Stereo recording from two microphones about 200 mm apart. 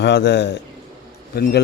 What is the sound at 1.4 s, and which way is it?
Speech, 50° left (ahead or behind).